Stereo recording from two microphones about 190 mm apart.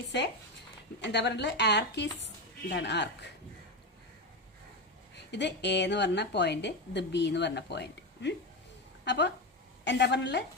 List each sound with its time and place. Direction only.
0.1 s a woman's voice: 65° left (ahead or behind)
5.1 s a woman's voice: 65° left (ahead or behind)